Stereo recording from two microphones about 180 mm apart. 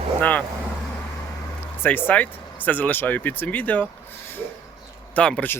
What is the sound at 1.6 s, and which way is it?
Speech, 10° left (ahead or behind).